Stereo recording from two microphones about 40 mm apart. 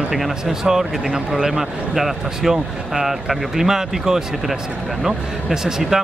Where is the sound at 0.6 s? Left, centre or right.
Centre.